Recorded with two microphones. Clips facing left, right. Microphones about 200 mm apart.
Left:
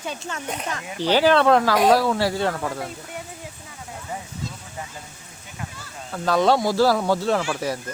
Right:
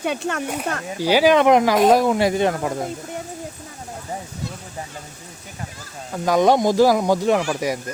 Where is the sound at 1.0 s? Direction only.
10° right (ahead or behind).